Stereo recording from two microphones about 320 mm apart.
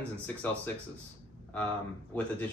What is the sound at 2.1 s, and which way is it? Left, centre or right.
Speech, centre.